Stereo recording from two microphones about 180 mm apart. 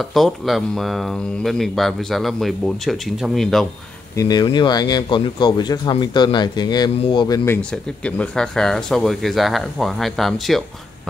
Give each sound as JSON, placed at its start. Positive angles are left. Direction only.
{"t": 0.0, "sound": "speech", "side_deg": 0}
{"t": 4.2, "sound": "speech", "side_deg": 20}